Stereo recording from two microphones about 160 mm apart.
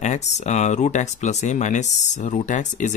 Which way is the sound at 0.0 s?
45° left (ahead or behind).